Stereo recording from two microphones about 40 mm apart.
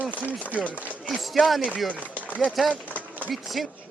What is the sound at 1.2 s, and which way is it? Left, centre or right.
Speech, centre.